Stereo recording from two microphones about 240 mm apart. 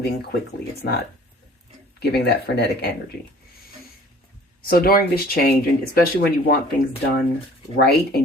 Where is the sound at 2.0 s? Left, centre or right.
Left.